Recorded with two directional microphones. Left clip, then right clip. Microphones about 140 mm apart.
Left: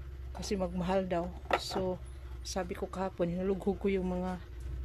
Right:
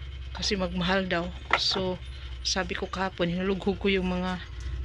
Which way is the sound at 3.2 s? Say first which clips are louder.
Right 4 dB; 15° left (ahead or behind).